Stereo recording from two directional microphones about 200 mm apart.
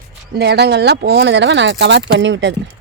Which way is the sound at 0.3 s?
55° right (ahead or behind).